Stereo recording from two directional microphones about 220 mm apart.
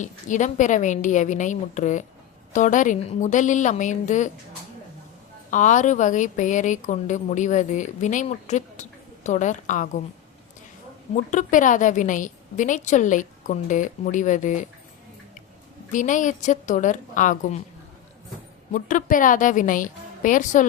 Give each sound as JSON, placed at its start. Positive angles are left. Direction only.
{"t": 0.0, "sound": "a woman's voice", "side_deg": 35}
{"t": 5.5, "sound": "a woman's voice", "side_deg": 35}
{"t": 11.1, "sound": "a woman's voice", "side_deg": 35}
{"t": 15.9, "sound": "a woman's voice", "side_deg": 35}
{"t": 18.7, "sound": "a woman's voice", "side_deg": 35}